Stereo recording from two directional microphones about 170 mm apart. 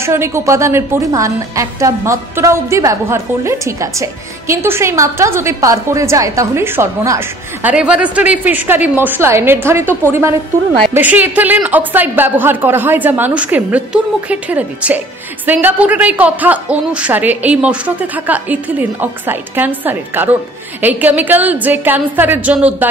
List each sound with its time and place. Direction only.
0.0 s a woman's voice: 15° right (ahead or behind)